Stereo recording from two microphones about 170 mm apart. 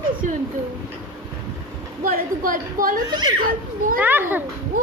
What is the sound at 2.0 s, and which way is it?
A woman's voice, 55° right (ahead or behind).